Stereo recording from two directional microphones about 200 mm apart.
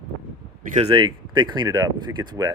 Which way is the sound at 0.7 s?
30° right (ahead or behind).